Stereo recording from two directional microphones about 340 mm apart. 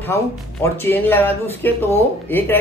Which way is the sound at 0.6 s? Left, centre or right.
Centre.